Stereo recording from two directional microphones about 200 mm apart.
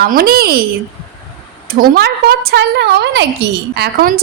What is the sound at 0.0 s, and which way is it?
Speech, 50° right (ahead or behind).